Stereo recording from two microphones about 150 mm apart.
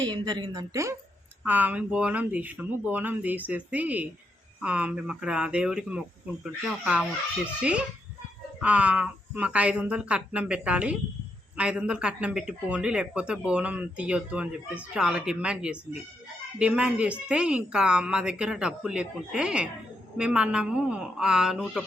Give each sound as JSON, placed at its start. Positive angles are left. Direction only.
{"t": 0.0, "sound": "a woman's voice", "side_deg": -30}
{"t": 1.5, "sound": "a woman's voice", "side_deg": -10}